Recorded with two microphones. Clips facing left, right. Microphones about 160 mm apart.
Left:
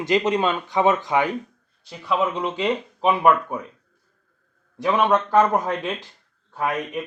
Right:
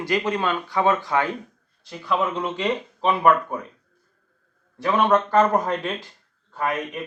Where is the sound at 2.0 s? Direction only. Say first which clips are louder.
Left 1 dB; centre (ahead or behind).